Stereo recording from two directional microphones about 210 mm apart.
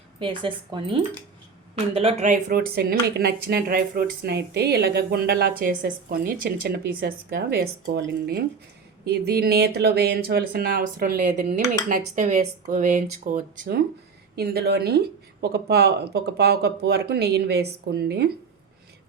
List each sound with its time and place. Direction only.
0.2 s speech: 25° right (ahead or behind); by 18.3 s 50° right (ahead or behind)